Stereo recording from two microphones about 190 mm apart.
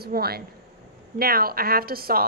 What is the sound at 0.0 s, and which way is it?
A woman's voice, 55° right (ahead or behind).